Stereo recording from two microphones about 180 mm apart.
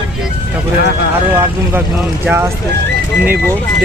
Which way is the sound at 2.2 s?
10° right (ahead or behind).